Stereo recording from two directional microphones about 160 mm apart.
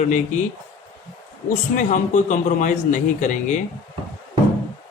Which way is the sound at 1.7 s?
55° left (ahead or behind).